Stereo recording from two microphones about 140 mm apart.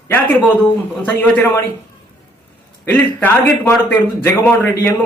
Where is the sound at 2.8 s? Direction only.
10° left (ahead or behind).